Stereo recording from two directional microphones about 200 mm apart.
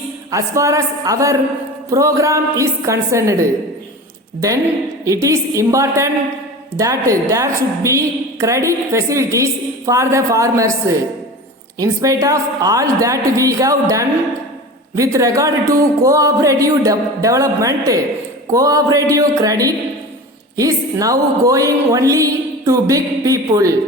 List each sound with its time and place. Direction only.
0.3 s a woman's voice: 15° right (ahead or behind)